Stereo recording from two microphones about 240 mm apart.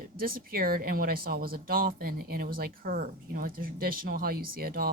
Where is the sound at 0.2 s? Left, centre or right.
Right.